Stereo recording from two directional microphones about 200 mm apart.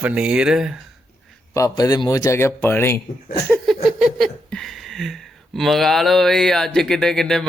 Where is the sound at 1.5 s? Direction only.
15° left (ahead or behind).